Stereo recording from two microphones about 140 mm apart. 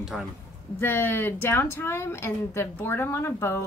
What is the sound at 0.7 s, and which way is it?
A woman's voice, 15° left (ahead or behind).